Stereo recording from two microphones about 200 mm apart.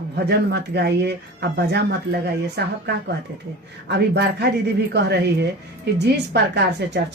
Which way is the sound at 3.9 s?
55° right (ahead or behind).